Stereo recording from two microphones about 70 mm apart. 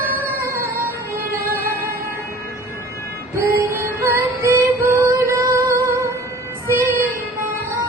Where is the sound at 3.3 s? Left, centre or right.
Right.